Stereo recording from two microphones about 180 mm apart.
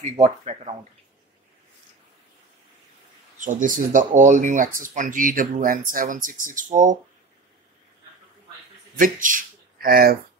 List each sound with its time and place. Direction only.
0.0 s speech: 40° right (ahead or behind)
3.3 s speech: 45° right (ahead or behind)
8.9 s speech: 50° right (ahead or behind)